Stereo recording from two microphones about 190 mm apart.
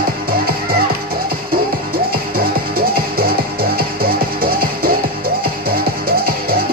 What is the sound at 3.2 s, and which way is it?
Music, 50° right (ahead or behind).